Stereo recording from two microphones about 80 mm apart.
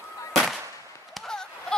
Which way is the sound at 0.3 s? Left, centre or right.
Centre.